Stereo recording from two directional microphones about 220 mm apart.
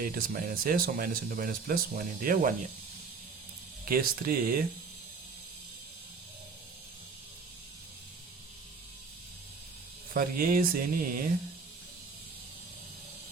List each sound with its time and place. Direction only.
0.0 s speech: 40° right (ahead or behind)
3.8 s speech: 40° right (ahead or behind)
10.2 s speech: 40° right (ahead or behind)